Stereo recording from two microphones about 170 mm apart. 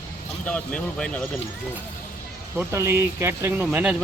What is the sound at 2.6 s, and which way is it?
Speech, 15° right (ahead or behind).